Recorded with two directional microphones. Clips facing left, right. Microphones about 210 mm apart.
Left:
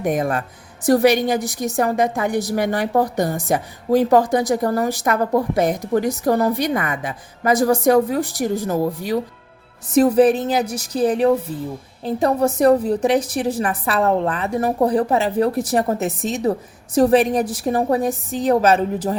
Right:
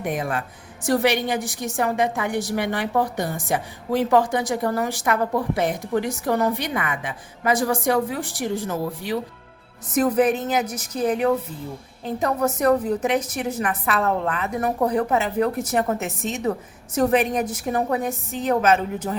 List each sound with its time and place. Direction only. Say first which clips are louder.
0.0 s a woman's voice: left 5 dB; 45° left (ahead or behind)